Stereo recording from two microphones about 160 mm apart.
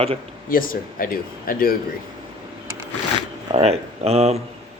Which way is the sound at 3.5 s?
40° right (ahead or behind).